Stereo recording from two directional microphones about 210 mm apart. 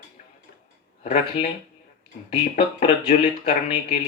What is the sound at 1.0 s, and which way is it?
Speech, 30° left (ahead or behind).